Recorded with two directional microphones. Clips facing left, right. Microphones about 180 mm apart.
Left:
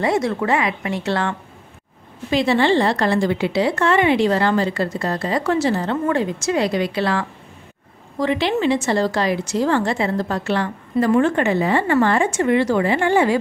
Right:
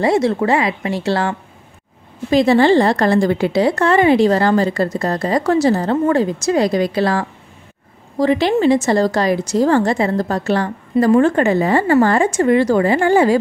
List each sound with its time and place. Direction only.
0.0 s speech: 30° right (ahead or behind)
2.3 s speech: 40° right (ahead or behind)